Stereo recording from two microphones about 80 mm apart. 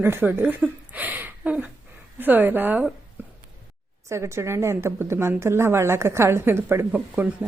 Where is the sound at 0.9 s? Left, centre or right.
Right.